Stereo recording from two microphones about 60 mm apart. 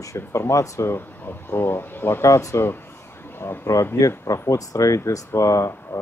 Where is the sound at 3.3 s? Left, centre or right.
Left.